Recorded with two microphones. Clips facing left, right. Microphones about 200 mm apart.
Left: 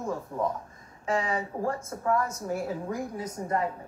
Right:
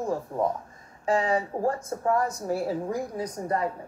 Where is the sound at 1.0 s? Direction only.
35° right (ahead or behind).